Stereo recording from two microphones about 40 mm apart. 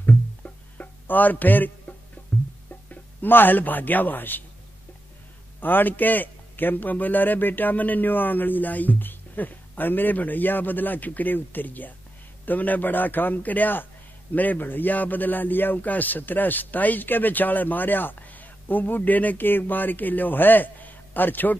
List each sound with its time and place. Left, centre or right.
0.0 s music: left
2.9 s a man's voice: left
5.6 s a man's voice: left